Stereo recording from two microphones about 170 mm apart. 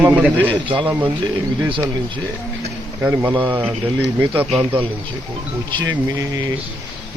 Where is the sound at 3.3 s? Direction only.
30° right (ahead or behind).